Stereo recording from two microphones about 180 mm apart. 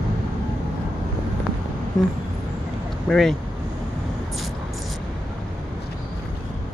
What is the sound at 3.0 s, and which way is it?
Speech, centre (ahead or behind).